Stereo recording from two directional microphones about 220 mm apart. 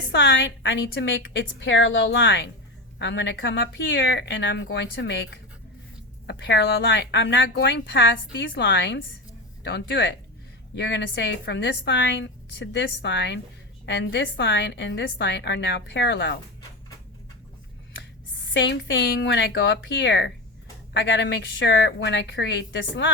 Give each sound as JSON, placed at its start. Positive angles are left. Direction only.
{"t": 0.1, "sound": "a woman's voice", "side_deg": 55}
{"t": 18.5, "sound": "a woman's voice", "side_deg": 55}